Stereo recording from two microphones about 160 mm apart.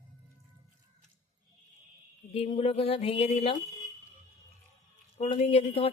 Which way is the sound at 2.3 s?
40° left (ahead or behind).